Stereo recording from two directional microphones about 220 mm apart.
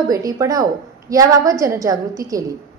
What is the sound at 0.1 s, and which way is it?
A woman's voice, 15° right (ahead or behind).